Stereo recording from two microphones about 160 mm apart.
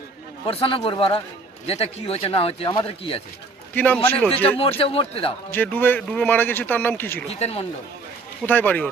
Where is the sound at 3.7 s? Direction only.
10° left (ahead or behind).